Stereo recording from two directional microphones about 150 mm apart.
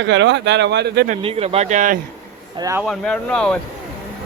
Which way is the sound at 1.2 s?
40° right (ahead or behind).